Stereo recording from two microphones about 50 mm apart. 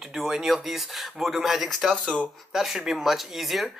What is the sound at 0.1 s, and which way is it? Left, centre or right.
Speech, centre.